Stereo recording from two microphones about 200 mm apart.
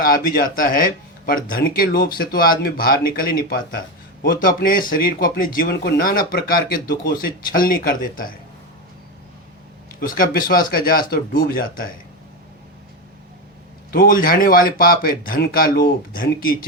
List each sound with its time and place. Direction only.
0.0 s speech: 45° left (ahead or behind)
10.0 s speech: 45° left (ahead or behind)
13.9 s speech: 45° left (ahead or behind)